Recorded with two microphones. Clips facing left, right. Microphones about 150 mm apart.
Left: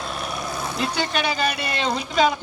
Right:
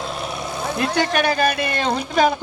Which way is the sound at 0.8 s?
55° right (ahead or behind).